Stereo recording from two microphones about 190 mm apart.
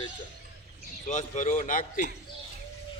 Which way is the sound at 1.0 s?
40° left (ahead or behind).